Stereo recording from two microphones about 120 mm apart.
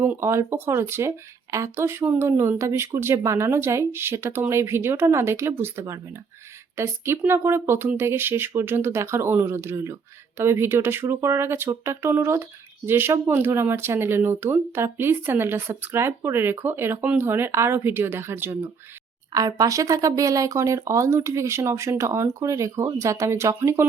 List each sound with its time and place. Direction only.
0.0 s speech: 20° right (ahead or behind)
19.3 s speech: 30° right (ahead or behind)